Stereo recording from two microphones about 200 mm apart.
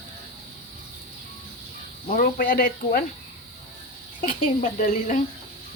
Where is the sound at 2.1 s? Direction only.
45° left (ahead or behind).